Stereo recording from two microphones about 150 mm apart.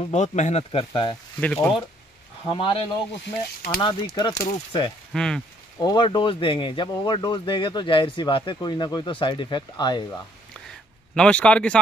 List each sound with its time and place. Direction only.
0.1 s speech: 50° left (ahead or behind)
1.4 s speech: 5° left (ahead or behind)
2.4 s speech: 35° left (ahead or behind)
3.8 s speech: 30° left (ahead or behind)
5.1 s speech: 5° left (ahead or behind)
5.8 s speech: 30° left (ahead or behind)
11.1 s speech: 5° left (ahead or behind)